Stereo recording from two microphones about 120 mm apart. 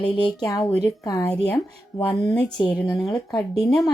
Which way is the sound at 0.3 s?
35° left (ahead or behind).